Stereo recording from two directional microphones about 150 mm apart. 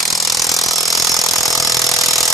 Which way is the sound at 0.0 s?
Centre (ahead or behind).